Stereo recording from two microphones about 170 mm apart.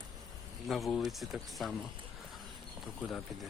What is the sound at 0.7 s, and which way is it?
Speech, centre (ahead or behind).